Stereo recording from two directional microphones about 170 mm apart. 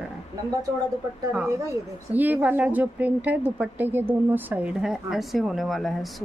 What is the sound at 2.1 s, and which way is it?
A woman's voice, 10° right (ahead or behind).